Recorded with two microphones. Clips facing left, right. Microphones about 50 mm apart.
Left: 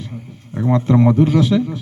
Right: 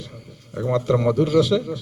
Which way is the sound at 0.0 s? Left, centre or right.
Left.